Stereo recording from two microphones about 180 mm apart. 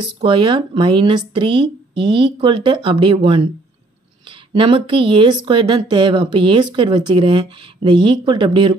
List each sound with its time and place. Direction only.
0.2 s speech: 30° right (ahead or behind)
4.5 s speech: 30° right (ahead or behind)